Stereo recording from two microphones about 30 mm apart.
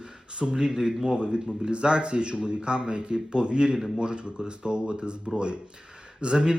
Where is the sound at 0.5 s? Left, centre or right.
Centre.